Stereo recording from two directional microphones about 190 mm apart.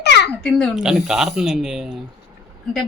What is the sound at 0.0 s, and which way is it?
Babbling, 60° left (ahead or behind).